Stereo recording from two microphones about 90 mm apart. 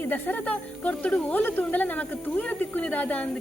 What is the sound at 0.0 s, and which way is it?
A woman's voice, 20° left (ahead or behind).